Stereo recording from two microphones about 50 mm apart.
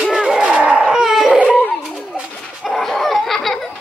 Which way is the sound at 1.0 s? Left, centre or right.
Centre.